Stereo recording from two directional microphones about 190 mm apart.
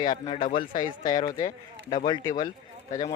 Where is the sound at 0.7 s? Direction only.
45° left (ahead or behind).